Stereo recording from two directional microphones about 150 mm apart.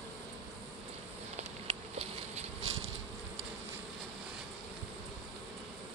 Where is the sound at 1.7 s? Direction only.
45° right (ahead or behind).